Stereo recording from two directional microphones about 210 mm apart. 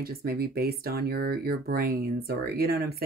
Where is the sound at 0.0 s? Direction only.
45° right (ahead or behind).